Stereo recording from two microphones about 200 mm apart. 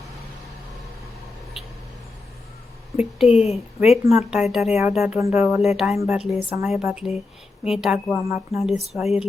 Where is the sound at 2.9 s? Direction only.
Centre (ahead or behind).